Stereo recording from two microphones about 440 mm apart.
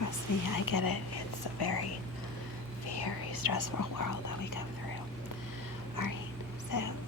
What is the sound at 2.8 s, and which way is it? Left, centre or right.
Speech, left.